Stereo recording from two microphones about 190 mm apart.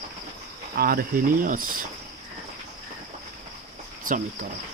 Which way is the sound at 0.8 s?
50° right (ahead or behind).